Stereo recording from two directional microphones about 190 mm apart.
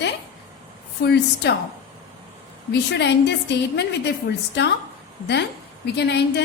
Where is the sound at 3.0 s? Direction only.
65° left (ahead or behind).